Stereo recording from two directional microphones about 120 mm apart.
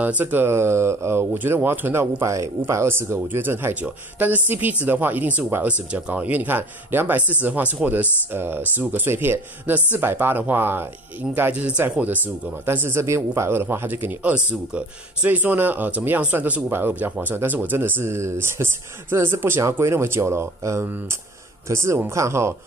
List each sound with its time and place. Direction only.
0.0 s speech: 15° right (ahead or behind)